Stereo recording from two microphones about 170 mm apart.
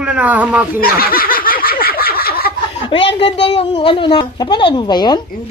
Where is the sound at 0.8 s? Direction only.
60° left (ahead or behind).